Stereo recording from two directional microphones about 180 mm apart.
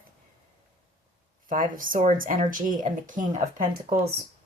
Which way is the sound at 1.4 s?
50° right (ahead or behind).